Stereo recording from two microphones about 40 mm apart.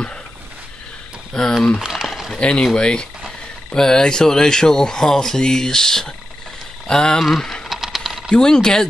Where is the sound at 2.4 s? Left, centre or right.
Left.